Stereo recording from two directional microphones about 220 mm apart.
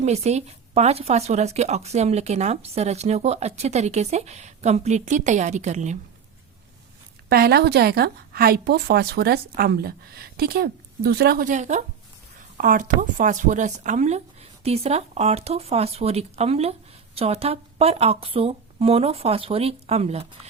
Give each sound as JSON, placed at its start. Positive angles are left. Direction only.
{"t": 0.0, "sound": "speech", "side_deg": -30}
{"t": 7.3, "sound": "a woman's voice", "side_deg": -45}